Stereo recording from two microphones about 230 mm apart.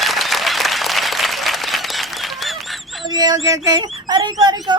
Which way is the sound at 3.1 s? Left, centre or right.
Centre.